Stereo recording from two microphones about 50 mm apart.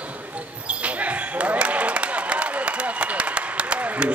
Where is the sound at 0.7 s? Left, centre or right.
Right.